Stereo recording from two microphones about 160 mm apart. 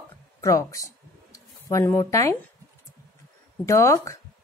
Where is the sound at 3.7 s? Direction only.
20° left (ahead or behind).